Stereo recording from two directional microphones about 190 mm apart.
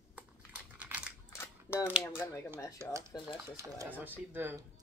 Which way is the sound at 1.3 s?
10° left (ahead or behind).